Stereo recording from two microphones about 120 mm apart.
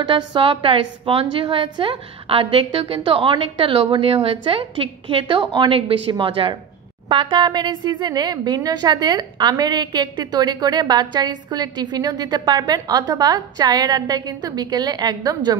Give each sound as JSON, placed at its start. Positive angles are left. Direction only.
{"t": 0.0, "sound": "a woman's voice", "side_deg": -45}